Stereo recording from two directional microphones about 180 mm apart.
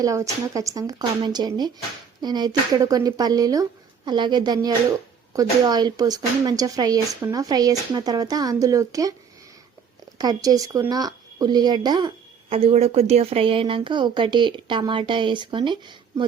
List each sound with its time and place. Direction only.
0.0 s speech: 20° right (ahead or behind)
10.2 s speech: 20° right (ahead or behind)